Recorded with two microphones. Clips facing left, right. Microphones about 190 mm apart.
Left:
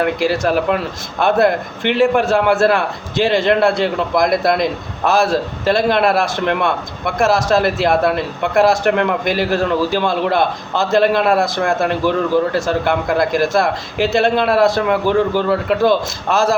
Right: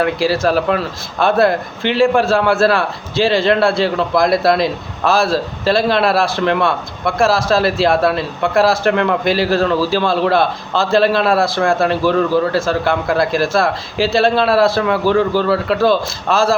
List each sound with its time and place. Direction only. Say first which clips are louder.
0.3 s a man's voice: right 2 dB; 15° left (ahead or behind)
2.0 s a man's voice: right 1 dB; 20° left (ahead or behind)